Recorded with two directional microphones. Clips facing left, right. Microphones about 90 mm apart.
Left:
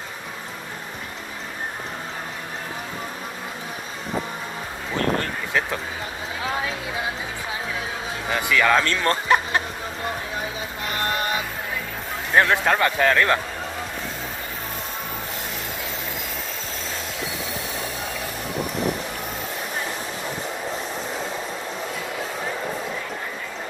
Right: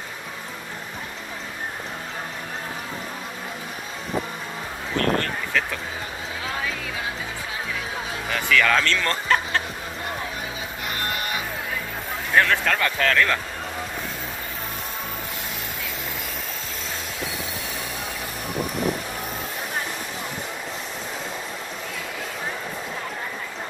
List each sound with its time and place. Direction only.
5.5 s speech: 20° left (ahead or behind)
8.3 s speech: 15° left (ahead or behind)
12.4 s speech: 20° left (ahead or behind)